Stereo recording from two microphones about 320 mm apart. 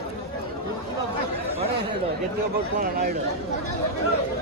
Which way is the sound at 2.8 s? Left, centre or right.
Right.